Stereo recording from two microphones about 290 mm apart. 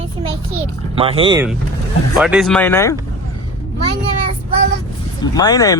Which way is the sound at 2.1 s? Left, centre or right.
Centre.